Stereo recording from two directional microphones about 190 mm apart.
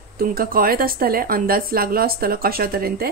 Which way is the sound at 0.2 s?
50° right (ahead or behind).